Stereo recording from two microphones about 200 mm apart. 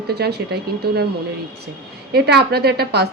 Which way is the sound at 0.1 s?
55° right (ahead or behind).